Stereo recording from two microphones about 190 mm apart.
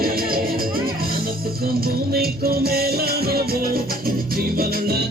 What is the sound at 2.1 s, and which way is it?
Music, 55° right (ahead or behind).